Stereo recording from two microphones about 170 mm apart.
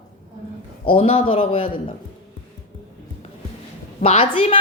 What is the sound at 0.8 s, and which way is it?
A woman's voice, 35° left (ahead or behind).